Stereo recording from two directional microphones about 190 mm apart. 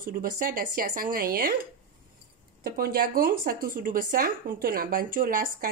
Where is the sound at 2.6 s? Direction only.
50° right (ahead or behind).